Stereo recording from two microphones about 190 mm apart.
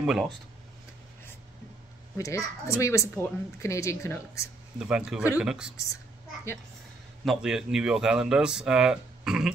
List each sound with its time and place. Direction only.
0.0 s speech: centre (ahead or behind)
2.1 s speech: 15° left (ahead or behind)
4.7 s speech: 5° right (ahead or behind)
7.2 s speech: 5° right (ahead or behind)